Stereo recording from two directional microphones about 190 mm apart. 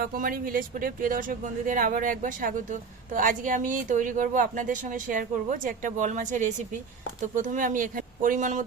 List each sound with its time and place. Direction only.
0.0 s speech: 50° right (ahead or behind)